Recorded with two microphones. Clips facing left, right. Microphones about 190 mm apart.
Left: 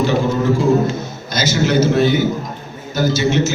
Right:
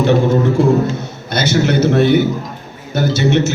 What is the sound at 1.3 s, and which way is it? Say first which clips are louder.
A man's voice: right 2 dB; 60° right (ahead or behind).